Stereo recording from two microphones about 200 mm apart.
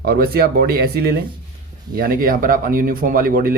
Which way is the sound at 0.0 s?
50° right (ahead or behind).